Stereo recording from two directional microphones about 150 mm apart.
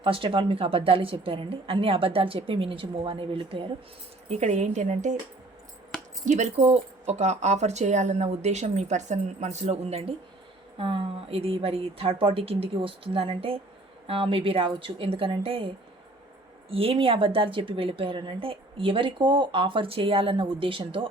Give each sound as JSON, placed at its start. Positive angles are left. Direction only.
{"t": 0.0, "sound": "a woman's voice", "side_deg": -35}
{"t": 4.3, "sound": "speech", "side_deg": -50}
{"t": 6.2, "sound": "a woman's voice", "side_deg": -50}